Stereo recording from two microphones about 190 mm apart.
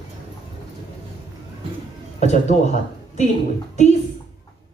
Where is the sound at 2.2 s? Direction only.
40° left (ahead or behind).